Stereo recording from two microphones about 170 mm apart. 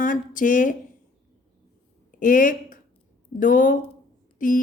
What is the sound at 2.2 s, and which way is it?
Speech, 50° left (ahead or behind).